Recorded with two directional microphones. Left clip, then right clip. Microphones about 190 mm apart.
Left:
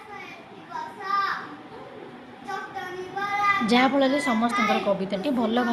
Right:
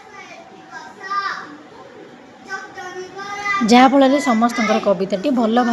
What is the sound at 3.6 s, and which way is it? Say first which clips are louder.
A woman's voice: right 9 dB; 35° right (ahead or behind).